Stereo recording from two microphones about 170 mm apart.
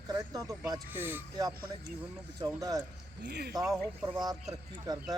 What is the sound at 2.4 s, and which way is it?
Speech, 20° right (ahead or behind).